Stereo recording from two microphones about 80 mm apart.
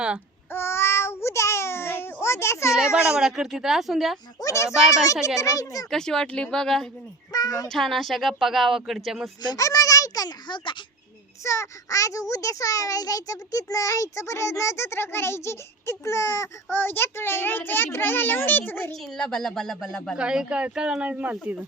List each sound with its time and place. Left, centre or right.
0.5 s child singing: left
2.7 s speech: centre
4.4 s a child's voice: left
5.9 s speech: centre
7.3 s speech: left
7.7 s speech: centre
9.4 s a child's voice: left
9.6 s a sound: left
11.4 s a child's voice: left
16.7 s a child's voice: left
18.9 s speech: centre
20.1 s speech: centre